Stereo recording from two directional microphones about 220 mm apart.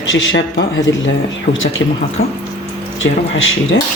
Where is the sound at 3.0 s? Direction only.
60° left (ahead or behind).